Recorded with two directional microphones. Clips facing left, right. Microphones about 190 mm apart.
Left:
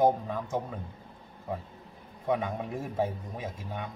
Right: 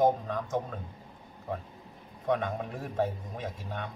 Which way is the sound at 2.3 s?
10° left (ahead or behind).